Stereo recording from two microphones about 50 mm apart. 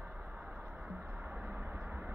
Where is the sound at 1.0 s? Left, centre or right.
Right.